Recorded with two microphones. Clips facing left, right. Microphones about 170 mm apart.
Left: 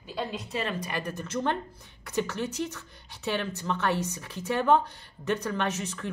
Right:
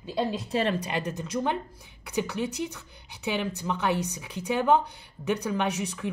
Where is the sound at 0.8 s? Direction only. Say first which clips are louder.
Right 3 dB; 20° right (ahead or behind).